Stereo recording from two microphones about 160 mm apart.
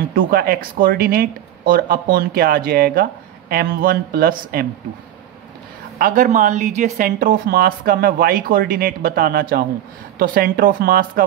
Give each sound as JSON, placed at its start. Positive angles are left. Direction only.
{"t": 0.1, "sound": "speech", "side_deg": -65}
{"t": 5.9, "sound": "speech", "side_deg": -60}